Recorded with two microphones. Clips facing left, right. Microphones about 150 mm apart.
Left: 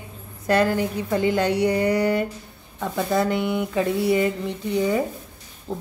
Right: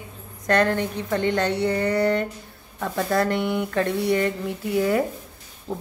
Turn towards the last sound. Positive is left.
turn(degrees=-5)  # may be behind; listen again after turning